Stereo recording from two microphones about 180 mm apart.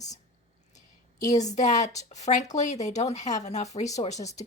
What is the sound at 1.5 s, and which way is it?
Speech, 40° left (ahead or behind).